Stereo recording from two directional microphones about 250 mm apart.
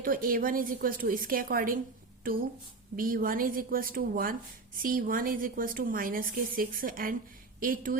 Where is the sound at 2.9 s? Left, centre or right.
Right.